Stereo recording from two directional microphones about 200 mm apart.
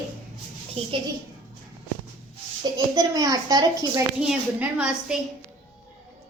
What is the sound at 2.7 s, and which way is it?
A child's voice, 20° right (ahead or behind).